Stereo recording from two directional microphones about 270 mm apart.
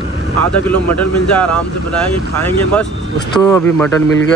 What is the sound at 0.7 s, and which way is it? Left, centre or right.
Speech, centre.